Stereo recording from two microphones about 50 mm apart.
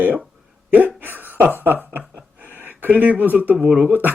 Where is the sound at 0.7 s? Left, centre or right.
Right.